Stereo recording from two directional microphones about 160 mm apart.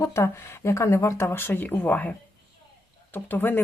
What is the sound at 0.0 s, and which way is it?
Speech, 15° left (ahead or behind).